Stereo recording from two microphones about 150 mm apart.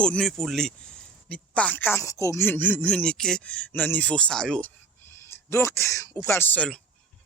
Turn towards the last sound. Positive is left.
turn(degrees=10)  # may be behind; listen again after turning